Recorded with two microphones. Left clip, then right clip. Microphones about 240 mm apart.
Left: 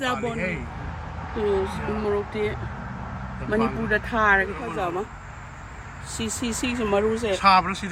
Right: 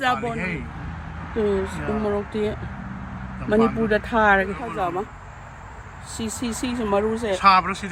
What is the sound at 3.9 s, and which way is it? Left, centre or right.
Speech, right.